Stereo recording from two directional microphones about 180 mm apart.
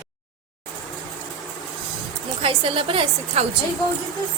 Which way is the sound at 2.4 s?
30° right (ahead or behind).